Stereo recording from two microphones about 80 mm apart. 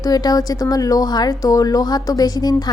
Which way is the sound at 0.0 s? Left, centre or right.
Left.